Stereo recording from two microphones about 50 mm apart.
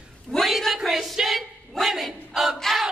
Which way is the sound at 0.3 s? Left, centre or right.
Centre.